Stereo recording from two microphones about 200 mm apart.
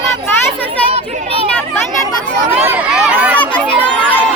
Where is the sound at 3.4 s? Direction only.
5° left (ahead or behind).